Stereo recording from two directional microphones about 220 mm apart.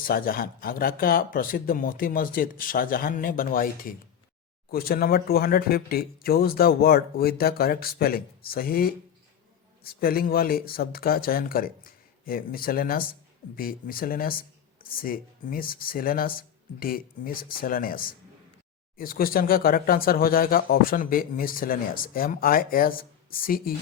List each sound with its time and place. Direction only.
0.0 s speech: 40° left (ahead or behind)